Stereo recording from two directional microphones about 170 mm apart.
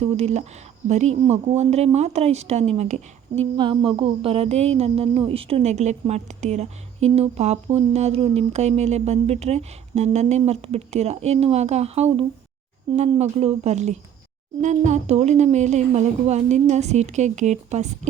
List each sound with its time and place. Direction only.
0.0 s speech: 40° right (ahead or behind)
3.6 s speech: 30° right (ahead or behind)